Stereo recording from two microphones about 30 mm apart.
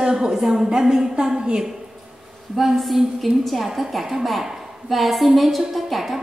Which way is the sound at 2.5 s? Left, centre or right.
Centre.